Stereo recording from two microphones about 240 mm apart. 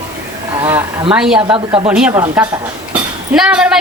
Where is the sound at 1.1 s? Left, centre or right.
Centre.